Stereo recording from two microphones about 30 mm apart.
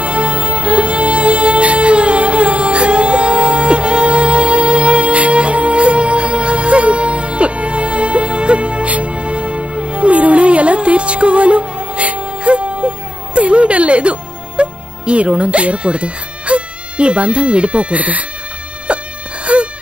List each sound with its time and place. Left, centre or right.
0.0 s music: right
10.1 s music: right
14.6 s speech: right
18.9 s music: right